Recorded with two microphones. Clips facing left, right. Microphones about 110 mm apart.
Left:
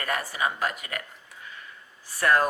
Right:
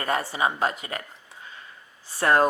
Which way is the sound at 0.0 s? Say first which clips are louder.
Right 3 dB; 25° right (ahead or behind).